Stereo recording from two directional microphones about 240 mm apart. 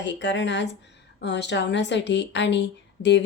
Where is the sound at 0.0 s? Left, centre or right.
Left.